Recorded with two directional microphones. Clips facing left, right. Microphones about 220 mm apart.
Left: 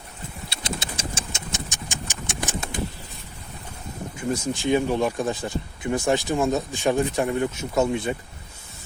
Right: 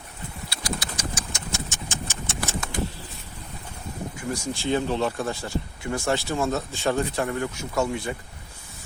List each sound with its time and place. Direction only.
0.5 s vehicle: 25° left (ahead or behind)
4.2 s speech: 20° left (ahead or behind)